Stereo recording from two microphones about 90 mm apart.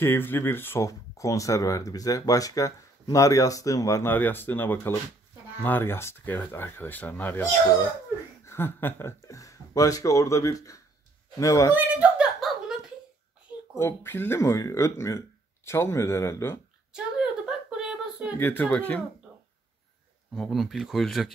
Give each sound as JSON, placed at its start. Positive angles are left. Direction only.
{"t": 0.0, "sound": "speech", "side_deg": 25}
{"t": 4.1, "sound": "speech", "side_deg": 20}
{"t": 8.5, "sound": "speech", "side_deg": 25}
{"t": 9.2, "sound": "speech", "side_deg": 35}
{"t": 11.7, "sound": "a sound", "side_deg": -15}
{"t": 12.4, "sound": "a sound", "side_deg": 0}
{"t": 13.7, "sound": "speech", "side_deg": 25}
{"t": 16.9, "sound": "a sound", "side_deg": -10}
{"t": 18.4, "sound": "speech", "side_deg": 20}
{"t": 20.3, "sound": "speech", "side_deg": 0}